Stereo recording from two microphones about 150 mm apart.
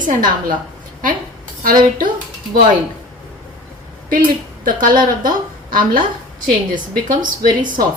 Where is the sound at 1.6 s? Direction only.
65° right (ahead or behind).